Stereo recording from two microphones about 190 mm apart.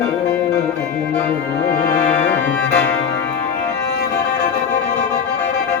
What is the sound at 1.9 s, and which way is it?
Music, 10° left (ahead or behind).